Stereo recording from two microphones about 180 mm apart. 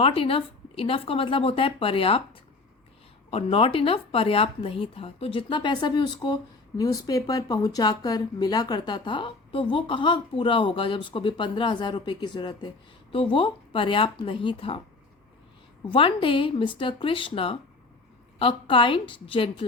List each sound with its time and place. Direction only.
0.0 s speech: 30° left (ahead or behind)
3.2 s speech: 30° left (ahead or behind)
15.9 s speech: 30° left (ahead or behind)